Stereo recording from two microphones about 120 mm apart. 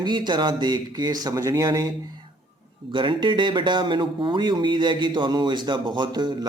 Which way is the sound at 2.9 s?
40° right (ahead or behind).